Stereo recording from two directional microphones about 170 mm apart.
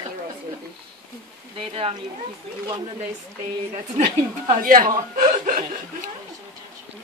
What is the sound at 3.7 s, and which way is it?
Speech, 40° right (ahead or behind).